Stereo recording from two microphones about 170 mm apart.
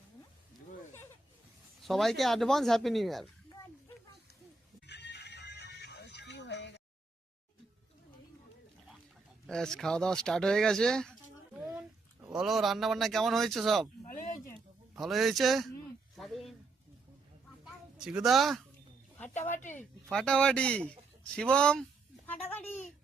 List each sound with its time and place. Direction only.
1.8 s speech: centre (ahead or behind)
4.9 s music: 85° left
9.5 s speech: 5° left (ahead or behind)
11.5 s a sound: 10° right (ahead or behind)
12.3 s speech: centre (ahead or behind)
14.9 s speech: centre (ahead or behind)
17.9 s speech: 5° right (ahead or behind)
19.7 s speech: 5° left (ahead or behind)